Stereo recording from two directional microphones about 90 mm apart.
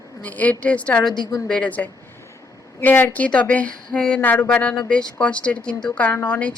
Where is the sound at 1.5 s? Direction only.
15° left (ahead or behind).